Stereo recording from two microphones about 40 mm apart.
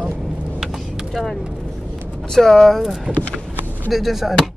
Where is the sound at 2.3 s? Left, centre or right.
Centre.